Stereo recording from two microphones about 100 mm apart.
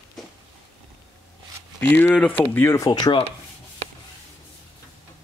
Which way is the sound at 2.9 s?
45° left (ahead or behind).